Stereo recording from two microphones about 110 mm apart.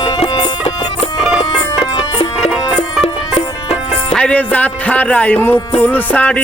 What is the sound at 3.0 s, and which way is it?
Music, 65° left (ahead or behind).